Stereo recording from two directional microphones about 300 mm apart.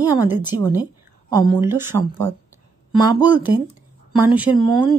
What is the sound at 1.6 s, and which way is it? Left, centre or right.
Speech, centre.